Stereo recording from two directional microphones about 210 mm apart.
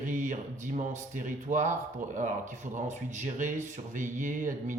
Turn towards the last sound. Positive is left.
turn(degrees=-35)  # may be behind; listen again after turning